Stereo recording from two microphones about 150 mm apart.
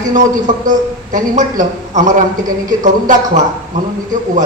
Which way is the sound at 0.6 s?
60° right (ahead or behind).